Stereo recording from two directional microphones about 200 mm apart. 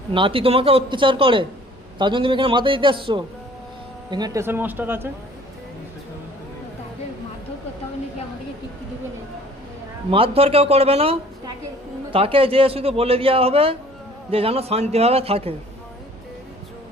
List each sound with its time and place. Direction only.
0.1 s a man's voice: 25° right (ahead or behind); by 5.0 s 10° right (ahead or behind)
10.1 s a man's voice: 25° right (ahead or behind)